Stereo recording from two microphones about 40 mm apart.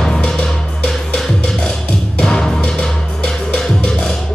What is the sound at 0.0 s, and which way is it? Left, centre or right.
Music, centre.